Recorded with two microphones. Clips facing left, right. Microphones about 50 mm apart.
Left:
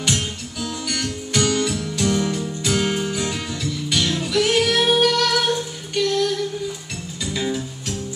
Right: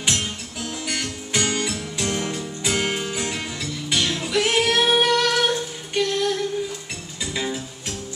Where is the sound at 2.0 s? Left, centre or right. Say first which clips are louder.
Left 5 dB; right.